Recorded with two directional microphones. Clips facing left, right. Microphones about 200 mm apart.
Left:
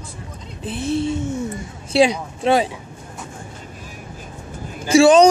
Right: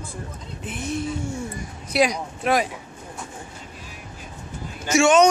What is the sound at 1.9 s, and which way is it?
Speech, 30° left (ahead or behind).